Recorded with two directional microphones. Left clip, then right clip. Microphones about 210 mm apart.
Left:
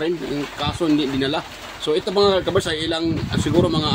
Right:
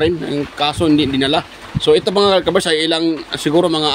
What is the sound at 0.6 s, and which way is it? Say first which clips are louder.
Speech: right 6 dB; 45° right (ahead or behind).